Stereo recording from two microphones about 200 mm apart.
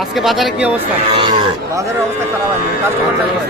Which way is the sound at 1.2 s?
20° right (ahead or behind).